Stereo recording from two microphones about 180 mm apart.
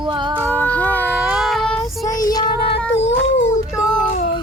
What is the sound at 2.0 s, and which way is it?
Child singing, 20° left (ahead or behind).